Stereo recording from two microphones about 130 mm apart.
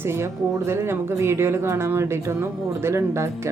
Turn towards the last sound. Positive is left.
turn(degrees=-20)  # may be behind; listen again after turning